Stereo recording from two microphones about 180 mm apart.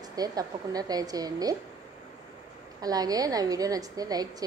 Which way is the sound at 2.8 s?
20° right (ahead or behind).